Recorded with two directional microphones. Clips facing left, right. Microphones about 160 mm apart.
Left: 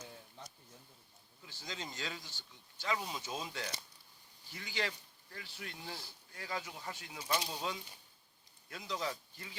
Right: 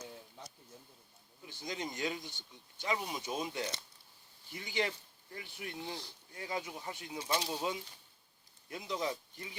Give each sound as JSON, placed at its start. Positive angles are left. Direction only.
{"t": 1.4, "sound": "speech", "side_deg": -20}